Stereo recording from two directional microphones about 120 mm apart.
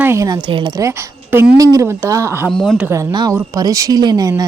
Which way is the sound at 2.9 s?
30° right (ahead or behind).